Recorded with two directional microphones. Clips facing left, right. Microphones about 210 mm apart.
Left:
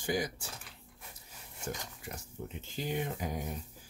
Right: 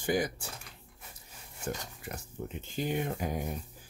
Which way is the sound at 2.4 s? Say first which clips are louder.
Right 5 dB; 50° right (ahead or behind).